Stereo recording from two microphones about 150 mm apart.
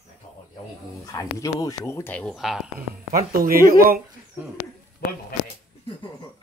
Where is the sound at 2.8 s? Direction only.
75° right (ahead or behind).